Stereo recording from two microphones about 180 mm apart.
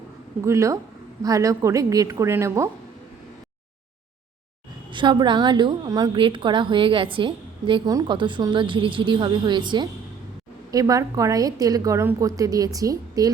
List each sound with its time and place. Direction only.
0.4 s a woman's voice: 15° right (ahead or behind)
4.9 s a woman's voice: 25° right (ahead or behind)